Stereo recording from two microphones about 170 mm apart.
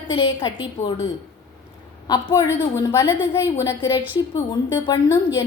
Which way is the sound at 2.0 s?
25° left (ahead or behind).